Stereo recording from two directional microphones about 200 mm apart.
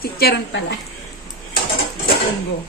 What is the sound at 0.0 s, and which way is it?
Speech, 55° left (ahead or behind).